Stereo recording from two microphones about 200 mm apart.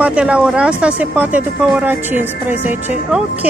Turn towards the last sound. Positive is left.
turn(degrees=-10)  # may be behind; listen again after turning